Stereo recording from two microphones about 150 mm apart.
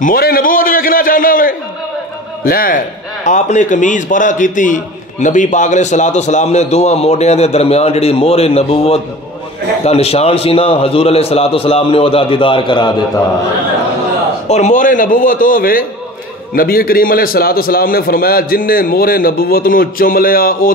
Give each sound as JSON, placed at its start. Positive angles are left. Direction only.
{"t": 0.0, "sound": "a sound", "side_deg": 80}
{"t": 2.4, "sound": "a man's voice", "side_deg": 75}
{"t": 3.3, "sound": "a man's voice", "side_deg": 55}
{"t": 14.5, "sound": "a man's voice", "side_deg": 55}